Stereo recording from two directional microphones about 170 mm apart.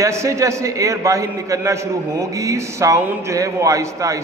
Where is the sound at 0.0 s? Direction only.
15° right (ahead or behind).